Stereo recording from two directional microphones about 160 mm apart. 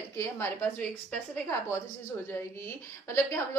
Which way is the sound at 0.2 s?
15° left (ahead or behind).